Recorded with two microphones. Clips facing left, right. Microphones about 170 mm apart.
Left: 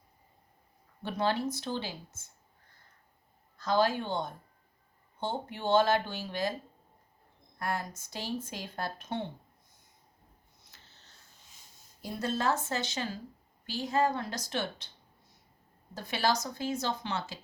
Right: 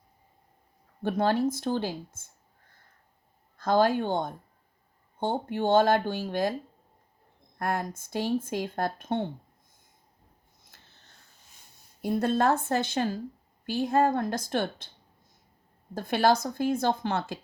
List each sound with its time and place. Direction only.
1.0 s speech: 50° right (ahead or behind)
3.6 s speech: 50° right (ahead or behind)
7.6 s speech: 55° right (ahead or behind)
10.7 s a sound: 55° right (ahead or behind)
12.0 s speech: 55° right (ahead or behind)
16.0 s speech: 55° right (ahead or behind)